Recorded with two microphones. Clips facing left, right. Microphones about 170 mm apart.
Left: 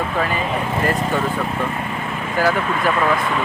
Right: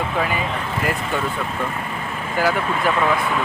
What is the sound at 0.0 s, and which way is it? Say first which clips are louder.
Speech: left 1 dB; 5° right (ahead or behind).